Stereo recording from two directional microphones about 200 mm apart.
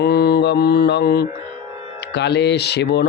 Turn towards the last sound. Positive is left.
turn(degrees=55)  # may be behind; listen again after turning